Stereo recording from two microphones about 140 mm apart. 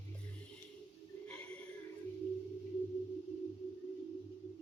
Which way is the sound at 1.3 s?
10° left (ahead or behind).